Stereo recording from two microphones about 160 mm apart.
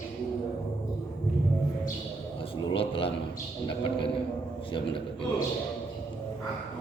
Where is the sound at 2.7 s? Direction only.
35° left (ahead or behind).